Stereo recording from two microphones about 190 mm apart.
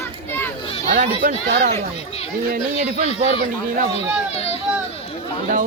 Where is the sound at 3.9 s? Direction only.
35° left (ahead or behind).